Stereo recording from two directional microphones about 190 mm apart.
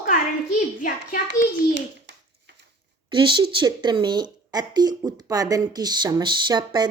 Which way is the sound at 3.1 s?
25° right (ahead or behind).